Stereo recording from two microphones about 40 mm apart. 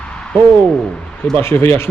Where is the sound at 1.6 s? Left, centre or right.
Left.